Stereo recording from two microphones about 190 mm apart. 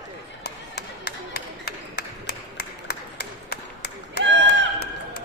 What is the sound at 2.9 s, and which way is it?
Clapping, 60° left (ahead or behind).